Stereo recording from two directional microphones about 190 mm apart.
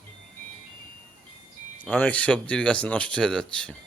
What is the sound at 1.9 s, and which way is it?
Speech, 5° left (ahead or behind).